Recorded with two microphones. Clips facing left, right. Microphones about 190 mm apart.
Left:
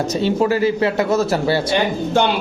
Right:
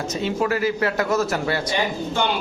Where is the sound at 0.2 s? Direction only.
30° left (ahead or behind).